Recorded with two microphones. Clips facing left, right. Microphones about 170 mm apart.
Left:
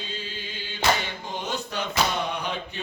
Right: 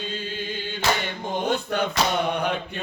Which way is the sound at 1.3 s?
55° right (ahead or behind).